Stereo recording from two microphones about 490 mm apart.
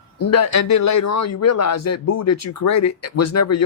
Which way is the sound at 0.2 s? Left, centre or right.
Left.